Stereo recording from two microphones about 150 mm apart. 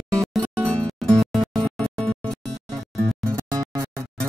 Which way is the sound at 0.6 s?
5° left (ahead or behind).